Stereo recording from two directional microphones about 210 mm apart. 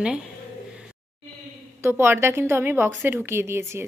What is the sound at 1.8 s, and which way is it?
A woman's voice, 10° right (ahead or behind).